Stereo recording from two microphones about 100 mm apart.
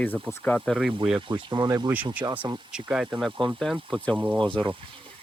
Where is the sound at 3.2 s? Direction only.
Centre (ahead or behind).